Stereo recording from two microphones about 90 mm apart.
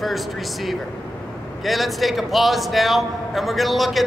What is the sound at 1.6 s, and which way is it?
A man's voice, centre (ahead or behind).